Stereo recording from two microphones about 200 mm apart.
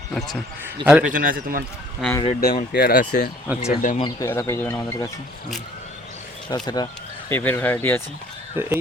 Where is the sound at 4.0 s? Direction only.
15° left (ahead or behind).